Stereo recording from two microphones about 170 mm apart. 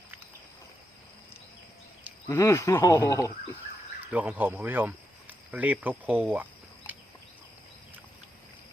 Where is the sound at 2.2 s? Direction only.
15° left (ahead or behind).